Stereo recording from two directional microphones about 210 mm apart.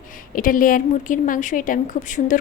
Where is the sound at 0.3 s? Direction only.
40° left (ahead or behind).